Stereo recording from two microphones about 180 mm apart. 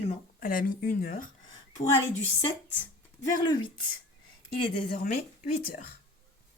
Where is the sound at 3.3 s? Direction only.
25° left (ahead or behind).